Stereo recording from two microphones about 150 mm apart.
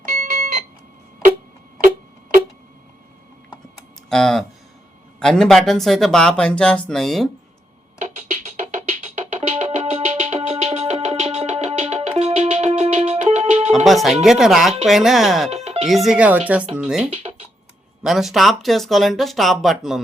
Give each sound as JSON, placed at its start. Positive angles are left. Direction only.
{"t": 4.1, "sound": "speech", "side_deg": 0}
{"t": 9.0, "sound": "music", "side_deg": -50}
{"t": 13.8, "sound": "speech", "side_deg": 0}
{"t": 15.6, "sound": "music", "side_deg": -45}
{"t": 15.9, "sound": "speech", "side_deg": 0}